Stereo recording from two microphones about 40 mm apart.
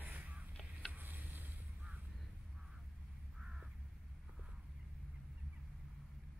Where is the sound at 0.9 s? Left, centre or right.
Right.